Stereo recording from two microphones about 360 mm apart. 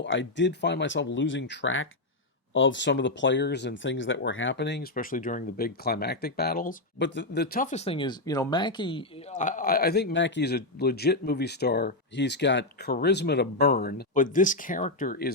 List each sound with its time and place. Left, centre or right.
0.0 s speech: left